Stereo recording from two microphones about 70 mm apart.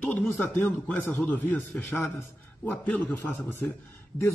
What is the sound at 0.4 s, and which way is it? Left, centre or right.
Speech, left.